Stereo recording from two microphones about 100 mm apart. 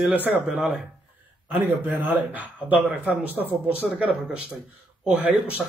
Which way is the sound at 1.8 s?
20° right (ahead or behind).